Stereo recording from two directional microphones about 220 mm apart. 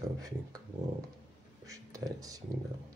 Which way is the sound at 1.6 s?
15° right (ahead or behind).